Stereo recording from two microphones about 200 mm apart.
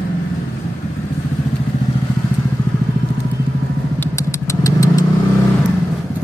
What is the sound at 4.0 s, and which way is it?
Vehicle, 15° left (ahead or behind).